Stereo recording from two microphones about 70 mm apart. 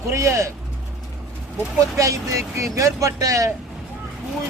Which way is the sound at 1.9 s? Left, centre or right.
Right.